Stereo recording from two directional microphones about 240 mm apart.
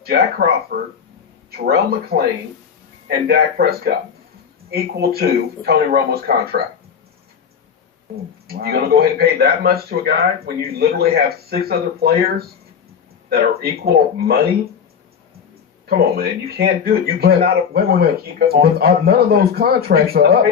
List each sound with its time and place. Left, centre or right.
0.0 s speech: right
8.4 s speech: right
15.9 s speech: right